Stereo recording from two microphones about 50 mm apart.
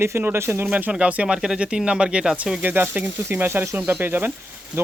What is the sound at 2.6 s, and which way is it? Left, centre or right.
Speech, right.